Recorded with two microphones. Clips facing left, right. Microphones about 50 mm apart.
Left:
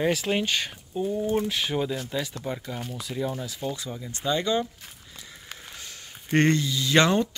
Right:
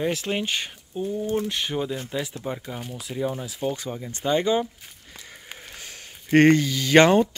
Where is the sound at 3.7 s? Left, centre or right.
Right.